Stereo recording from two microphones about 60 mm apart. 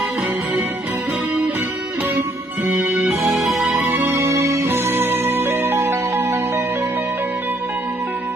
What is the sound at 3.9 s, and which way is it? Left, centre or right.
Music, right.